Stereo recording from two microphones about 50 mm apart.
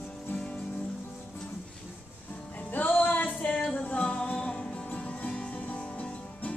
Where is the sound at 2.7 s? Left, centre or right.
Left.